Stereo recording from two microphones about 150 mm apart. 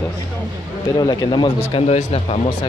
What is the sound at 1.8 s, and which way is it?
Speech, 45° left (ahead or behind).